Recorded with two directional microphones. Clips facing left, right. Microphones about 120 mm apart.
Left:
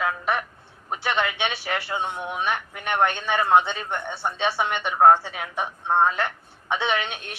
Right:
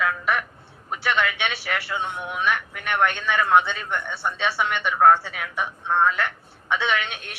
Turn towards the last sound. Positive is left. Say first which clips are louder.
# even
turn(degrees=30)  # may be behind; listen again after turning